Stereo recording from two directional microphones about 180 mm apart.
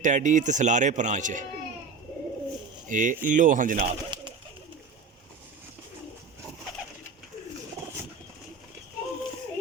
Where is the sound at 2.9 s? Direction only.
45° right (ahead or behind).